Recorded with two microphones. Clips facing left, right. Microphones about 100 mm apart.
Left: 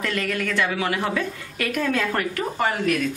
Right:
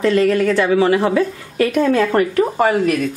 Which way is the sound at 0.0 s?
30° right (ahead or behind).